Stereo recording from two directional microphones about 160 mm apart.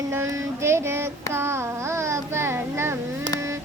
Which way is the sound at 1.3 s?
15° right (ahead or behind).